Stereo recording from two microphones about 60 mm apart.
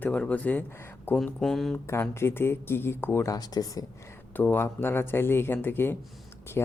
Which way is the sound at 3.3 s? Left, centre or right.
Left.